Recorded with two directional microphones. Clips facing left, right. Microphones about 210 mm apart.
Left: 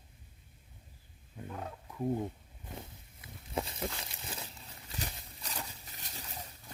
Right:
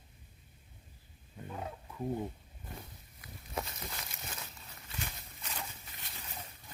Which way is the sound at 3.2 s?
30° left (ahead or behind).